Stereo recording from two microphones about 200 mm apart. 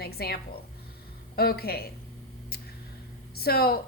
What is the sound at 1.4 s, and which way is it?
Speech, 50° left (ahead or behind).